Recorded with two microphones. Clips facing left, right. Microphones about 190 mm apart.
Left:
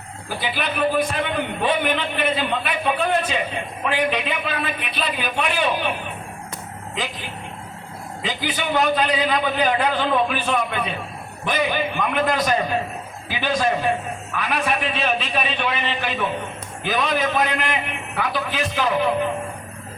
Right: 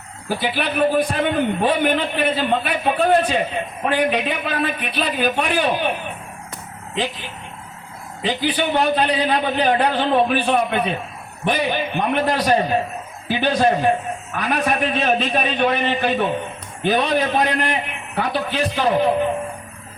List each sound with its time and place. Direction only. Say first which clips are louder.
0.3 s a man's voice: right 4 dB; 45° right (ahead or behind)
8.2 s a man's voice: right 6 dB; 35° right (ahead or behind)